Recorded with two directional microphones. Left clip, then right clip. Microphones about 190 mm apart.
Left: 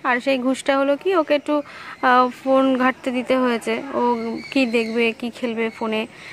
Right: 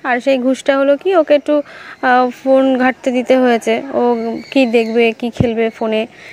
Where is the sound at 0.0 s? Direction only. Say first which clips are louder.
Right 6 dB; 20° right (ahead or behind).